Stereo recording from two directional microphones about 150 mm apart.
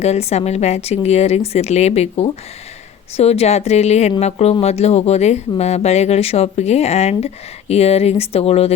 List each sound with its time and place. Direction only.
0.0 s speech: 45° left (ahead or behind)